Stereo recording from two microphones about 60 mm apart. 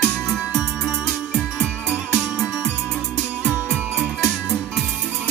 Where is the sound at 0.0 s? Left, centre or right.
Centre.